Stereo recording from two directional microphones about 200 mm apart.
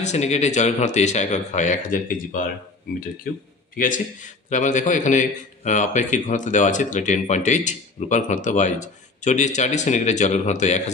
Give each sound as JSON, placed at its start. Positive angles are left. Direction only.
{"t": 0.0, "sound": "a man's voice", "side_deg": 35}
{"t": 3.7, "sound": "a man's voice", "side_deg": 40}